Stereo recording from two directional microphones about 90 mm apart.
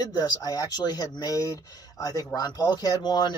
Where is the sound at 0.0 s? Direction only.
45° left (ahead or behind).